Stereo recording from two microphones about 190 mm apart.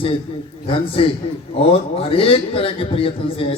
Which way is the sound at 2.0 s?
30° left (ahead or behind).